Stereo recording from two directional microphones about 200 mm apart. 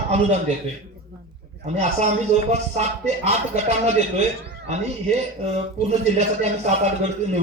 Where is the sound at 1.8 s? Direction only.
35° right (ahead or behind).